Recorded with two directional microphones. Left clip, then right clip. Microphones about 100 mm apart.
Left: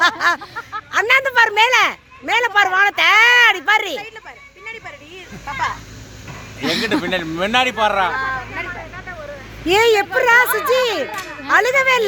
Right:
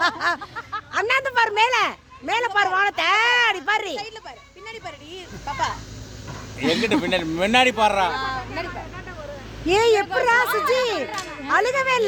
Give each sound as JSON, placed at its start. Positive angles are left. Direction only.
{"t": 0.0, "sound": "speech", "side_deg": 20}
{"t": 6.8, "sound": "speech", "side_deg": -25}
{"t": 9.6, "sound": "speech", "side_deg": 25}